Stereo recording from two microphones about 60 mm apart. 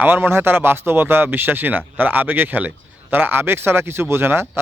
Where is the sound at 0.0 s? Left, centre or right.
Right.